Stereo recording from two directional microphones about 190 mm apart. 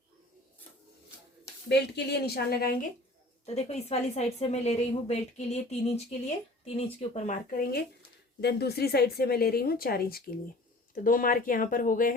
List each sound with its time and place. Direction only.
2.2 s speech: 55° left (ahead or behind)
3.4 s a woman's voice: 35° left (ahead or behind)